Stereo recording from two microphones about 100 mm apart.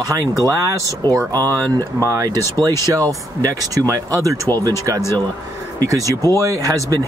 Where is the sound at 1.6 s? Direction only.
30° right (ahead or behind).